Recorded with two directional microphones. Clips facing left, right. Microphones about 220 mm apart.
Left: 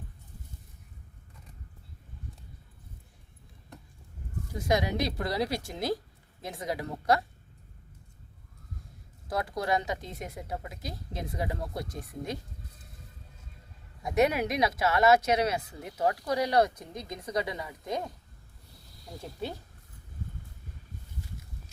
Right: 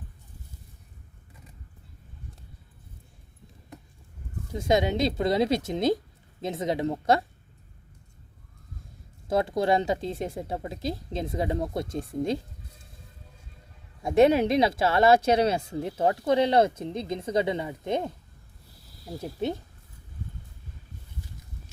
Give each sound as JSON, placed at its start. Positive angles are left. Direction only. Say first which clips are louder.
{"t": 4.5, "sound": "speech", "louder": "right 4 dB", "side_deg": -25}
{"t": 9.2, "sound": "speech", "louder": "right 7 dB", "side_deg": -25}
{"t": 14.0, "sound": "speech", "louder": "right 6 dB", "side_deg": -30}
{"t": 19.2, "sound": "speech", "louder": "right 7 dB", "side_deg": -20}